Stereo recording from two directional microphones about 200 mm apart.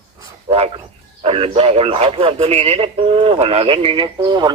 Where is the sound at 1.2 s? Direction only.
30° right (ahead or behind).